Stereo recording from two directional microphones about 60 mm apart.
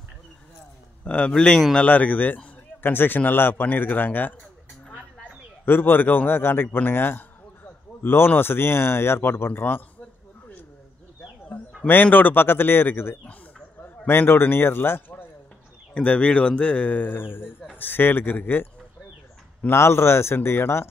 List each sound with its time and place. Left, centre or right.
1.0 s a man's voice: centre
1.8 s a man's voice: left
5.7 s a man's voice: left
11.9 s a man's voice: left
15.9 s a man's voice: left
19.7 s speech: left